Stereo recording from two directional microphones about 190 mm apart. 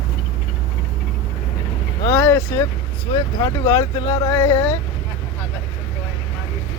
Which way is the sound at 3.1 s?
15° left (ahead or behind).